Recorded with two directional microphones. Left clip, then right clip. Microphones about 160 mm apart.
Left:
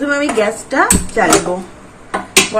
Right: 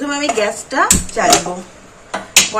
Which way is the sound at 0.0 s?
20° right (ahead or behind).